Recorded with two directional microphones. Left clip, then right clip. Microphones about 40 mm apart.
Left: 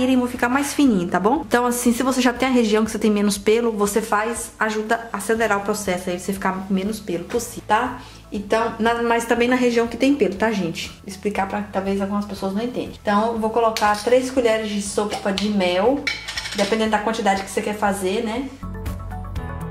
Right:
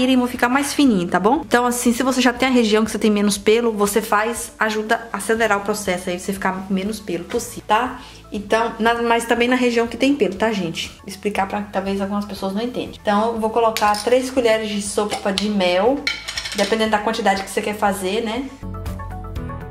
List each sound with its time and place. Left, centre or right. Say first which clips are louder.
0.0 s a woman's voice: right 2 dB; right; by 10.9 s centre
11.2 s a woman's voice: right 2 dB; right
13.1 s a woman's voice: right 1 dB; centre
13.8 s a woman's voice: right 1 dB; right